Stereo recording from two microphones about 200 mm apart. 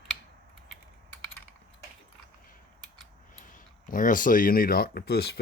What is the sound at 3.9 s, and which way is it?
Speech, 40° left (ahead or behind).